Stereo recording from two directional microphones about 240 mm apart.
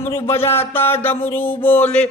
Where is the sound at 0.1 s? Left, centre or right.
Centre.